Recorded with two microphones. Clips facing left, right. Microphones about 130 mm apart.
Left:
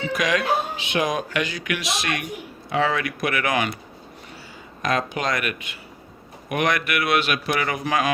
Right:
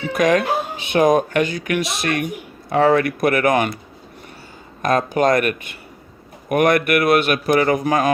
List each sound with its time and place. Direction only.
0.1 s speech: 50° right (ahead or behind)
4.8 s speech: 50° right (ahead or behind)